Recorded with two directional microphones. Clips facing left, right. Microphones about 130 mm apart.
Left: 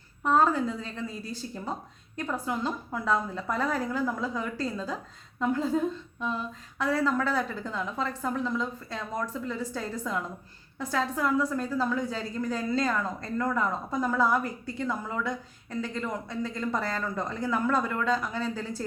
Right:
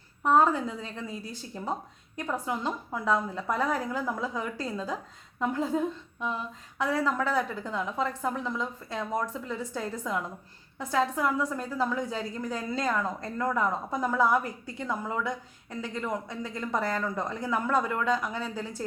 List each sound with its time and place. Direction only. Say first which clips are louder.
0.2 s speech: right 1 dB; 15° right (ahead or behind)